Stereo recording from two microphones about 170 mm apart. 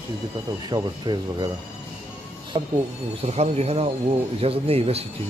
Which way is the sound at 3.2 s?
40° right (ahead or behind).